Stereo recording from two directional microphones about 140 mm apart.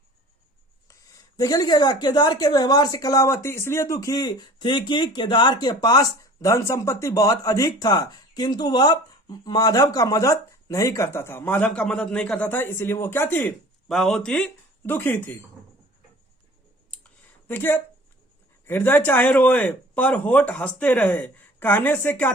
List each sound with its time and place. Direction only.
0.9 s speech: 25° left (ahead or behind)
13.8 s speech: centre (ahead or behind)
17.5 s speech: 15° left (ahead or behind)